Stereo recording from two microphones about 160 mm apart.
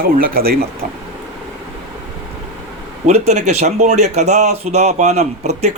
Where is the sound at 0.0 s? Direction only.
65° right (ahead or behind).